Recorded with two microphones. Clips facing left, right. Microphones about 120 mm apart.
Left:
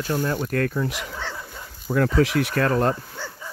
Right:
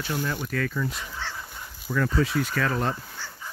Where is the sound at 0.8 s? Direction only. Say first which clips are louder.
Left 4 dB; 85° left; by 2.9 s 55° left (ahead or behind).